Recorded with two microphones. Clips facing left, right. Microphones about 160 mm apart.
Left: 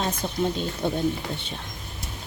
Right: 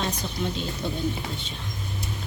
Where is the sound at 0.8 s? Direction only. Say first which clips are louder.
Left 6 dB; 55° left (ahead or behind).